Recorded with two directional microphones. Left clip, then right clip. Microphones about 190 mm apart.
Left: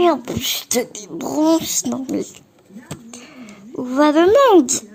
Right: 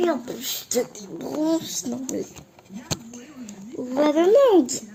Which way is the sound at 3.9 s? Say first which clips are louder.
Left 5 dB; 60° left (ahead or behind).